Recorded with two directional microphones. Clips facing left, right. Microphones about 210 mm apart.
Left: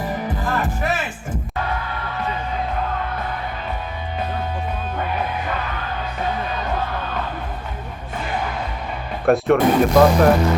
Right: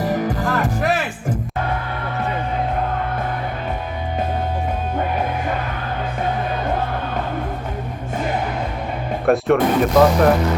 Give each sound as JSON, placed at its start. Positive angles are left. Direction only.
{"t": 0.4, "sound": "music", "side_deg": -40}
{"t": 9.2, "sound": "speech", "side_deg": 0}